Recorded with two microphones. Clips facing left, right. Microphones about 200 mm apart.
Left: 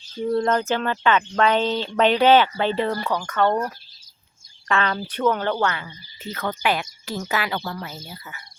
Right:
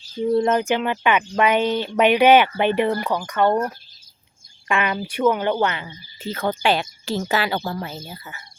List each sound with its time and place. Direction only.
0.3 s speech: 20° right (ahead or behind)
4.7 s speech: 15° right (ahead or behind)